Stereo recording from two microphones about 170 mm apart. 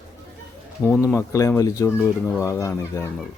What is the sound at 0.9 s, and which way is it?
Speech, centre (ahead or behind).